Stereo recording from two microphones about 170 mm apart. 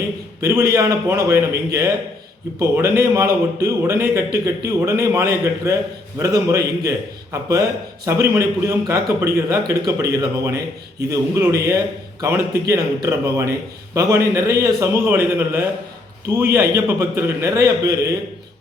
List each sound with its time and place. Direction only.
0.7 s a man's voice: 15° right (ahead or behind)
8.0 s a man's voice: 15° right (ahead or behind)